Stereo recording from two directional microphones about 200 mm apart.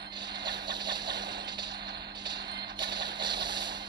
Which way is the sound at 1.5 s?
20° right (ahead or behind).